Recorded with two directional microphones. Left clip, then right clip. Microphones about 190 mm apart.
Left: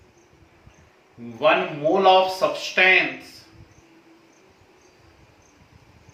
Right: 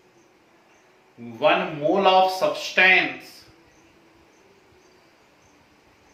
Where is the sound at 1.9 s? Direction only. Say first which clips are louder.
Left 1 dB; 15° right (ahead or behind).